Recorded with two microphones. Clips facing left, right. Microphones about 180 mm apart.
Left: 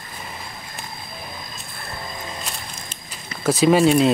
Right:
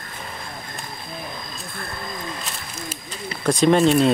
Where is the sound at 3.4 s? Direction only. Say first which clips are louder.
Left 1 dB; 5° left (ahead or behind).